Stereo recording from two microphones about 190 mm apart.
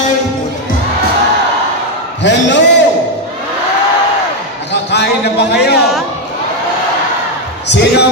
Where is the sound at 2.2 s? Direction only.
70° left (ahead or behind).